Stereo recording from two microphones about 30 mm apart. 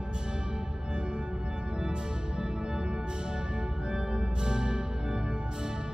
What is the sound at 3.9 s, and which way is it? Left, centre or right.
Music, right.